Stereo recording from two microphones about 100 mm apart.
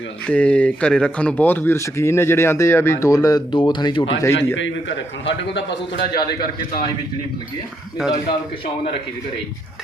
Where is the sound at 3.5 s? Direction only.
50° left (ahead or behind).